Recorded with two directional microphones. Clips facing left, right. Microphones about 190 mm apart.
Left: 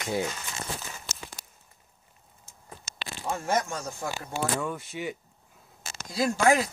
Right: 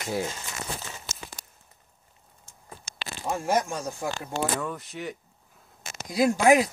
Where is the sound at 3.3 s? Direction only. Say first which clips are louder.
Right 2 dB; 10° right (ahead or behind).